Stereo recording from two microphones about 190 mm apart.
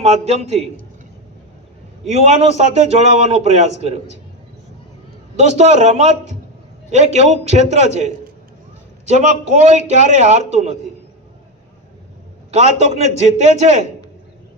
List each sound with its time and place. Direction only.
0.0 s a man's voice: 35° right (ahead or behind)
2.0 s a man's voice: 35° right (ahead or behind)
5.4 s a man's voice: 35° right (ahead or behind)
12.5 s a man's voice: 35° right (ahead or behind)